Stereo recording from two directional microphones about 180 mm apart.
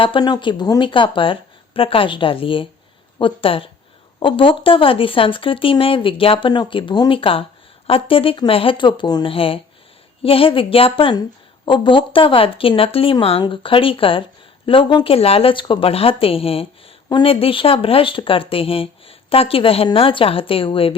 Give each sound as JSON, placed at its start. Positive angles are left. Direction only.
{"t": 0.0, "sound": "speech", "side_deg": 25}